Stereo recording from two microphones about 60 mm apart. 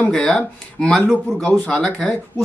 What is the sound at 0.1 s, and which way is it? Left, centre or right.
Speech, centre.